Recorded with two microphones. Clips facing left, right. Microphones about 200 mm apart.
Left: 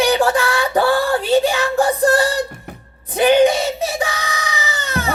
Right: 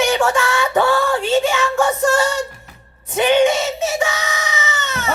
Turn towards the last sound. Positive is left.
turn(degrees=35)  # may be behind; listen again after turning